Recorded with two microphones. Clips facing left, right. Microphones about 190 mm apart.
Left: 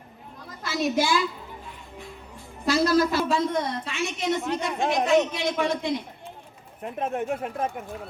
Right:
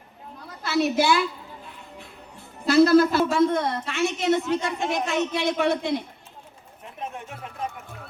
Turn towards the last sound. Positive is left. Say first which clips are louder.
# left 7 dB
turn(degrees=55)  # may be behind; listen again after turning